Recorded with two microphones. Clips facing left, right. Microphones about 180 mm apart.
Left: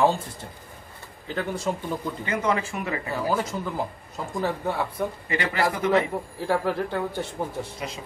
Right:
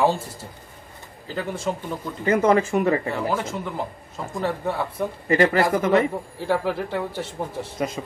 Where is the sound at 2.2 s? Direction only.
40° right (ahead or behind).